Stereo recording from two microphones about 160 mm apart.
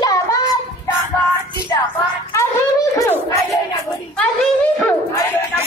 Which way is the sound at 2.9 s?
20° left (ahead or behind).